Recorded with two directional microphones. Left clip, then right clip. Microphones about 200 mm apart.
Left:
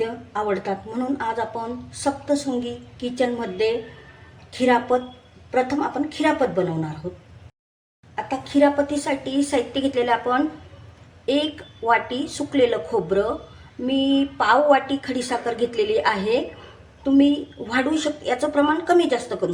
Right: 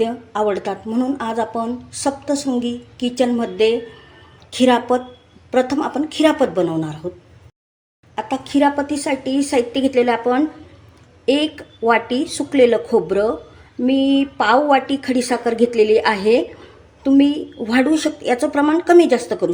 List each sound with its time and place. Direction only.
0.0 s a woman's voice: 40° right (ahead or behind)
8.1 s a woman's voice: 40° right (ahead or behind)